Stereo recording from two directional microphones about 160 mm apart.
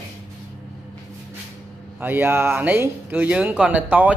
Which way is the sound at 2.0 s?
10° right (ahead or behind).